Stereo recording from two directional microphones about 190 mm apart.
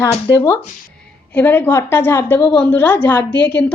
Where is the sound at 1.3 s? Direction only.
10° left (ahead or behind).